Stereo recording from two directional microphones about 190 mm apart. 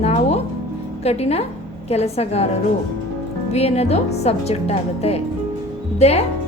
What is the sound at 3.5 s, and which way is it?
Speech, 35° left (ahead or behind).